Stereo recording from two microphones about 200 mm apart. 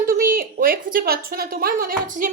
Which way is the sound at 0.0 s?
45° right (ahead or behind).